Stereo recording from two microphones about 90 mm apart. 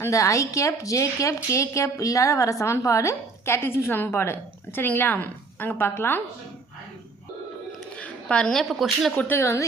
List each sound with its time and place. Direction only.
0.0 s a woman's voice: 35° left (ahead or behind)
7.9 s a woman's voice: 10° left (ahead or behind)
9.1 s speech: 20° left (ahead or behind)